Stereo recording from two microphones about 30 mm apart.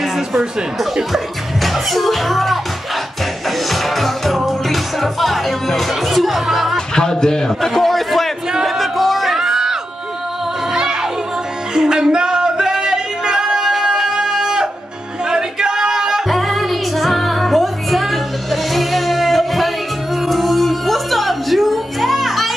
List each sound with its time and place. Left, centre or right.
0.0 s a sound: centre
0.7 s speech: centre
3.4 s music: centre
7.0 s a man's voice: left; by 8.3 s centre
8.6 s music: centre
9.4 s music: centre
10.7 s a sound: right
16.3 s music: centre